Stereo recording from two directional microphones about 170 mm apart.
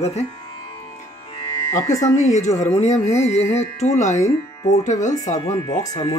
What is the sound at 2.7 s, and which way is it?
Music, 40° left (ahead or behind).